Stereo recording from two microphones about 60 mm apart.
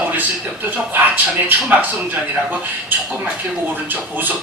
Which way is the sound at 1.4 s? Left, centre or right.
Right.